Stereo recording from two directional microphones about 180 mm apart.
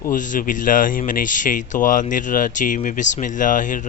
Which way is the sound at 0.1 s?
45° left (ahead or behind).